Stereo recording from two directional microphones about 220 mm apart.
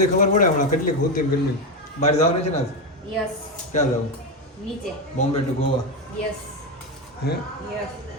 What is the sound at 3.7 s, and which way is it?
Speech, 30° left (ahead or behind).